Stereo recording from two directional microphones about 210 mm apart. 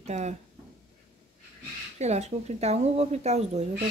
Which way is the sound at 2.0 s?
30° right (ahead or behind).